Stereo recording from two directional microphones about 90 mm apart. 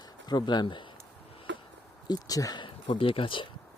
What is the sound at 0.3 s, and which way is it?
Speech, 55° left (ahead or behind).